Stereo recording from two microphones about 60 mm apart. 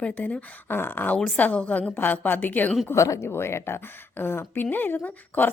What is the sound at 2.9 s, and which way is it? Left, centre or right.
A woman's voice, left.